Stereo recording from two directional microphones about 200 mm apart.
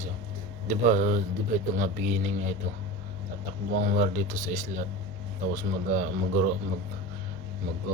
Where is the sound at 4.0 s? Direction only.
40° right (ahead or behind).